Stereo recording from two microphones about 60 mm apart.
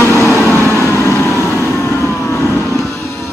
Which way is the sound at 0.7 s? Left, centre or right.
Left.